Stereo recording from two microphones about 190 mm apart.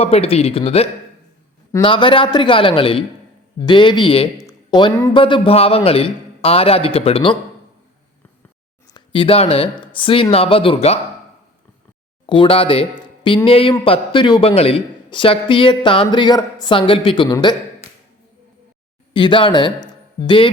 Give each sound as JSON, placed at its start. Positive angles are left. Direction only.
{"t": 0.0, "sound": "speech", "side_deg": 30}
{"t": 8.9, "sound": "speech", "side_deg": 25}
{"t": 12.2, "sound": "speech", "side_deg": 25}
{"t": 19.1, "sound": "a man's voice", "side_deg": 25}